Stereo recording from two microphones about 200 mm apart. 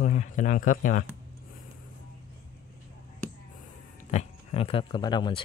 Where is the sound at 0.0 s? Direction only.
35° left (ahead or behind).